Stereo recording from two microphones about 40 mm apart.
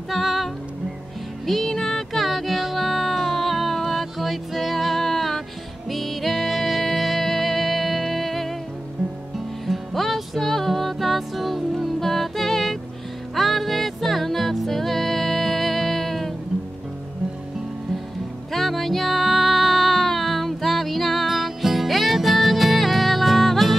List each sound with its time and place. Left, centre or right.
0.1 s music: centre
2.2 s music: centre
9.7 s music: centre
18.5 s music: centre